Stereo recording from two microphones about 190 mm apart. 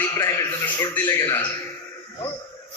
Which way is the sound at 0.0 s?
15° left (ahead or behind).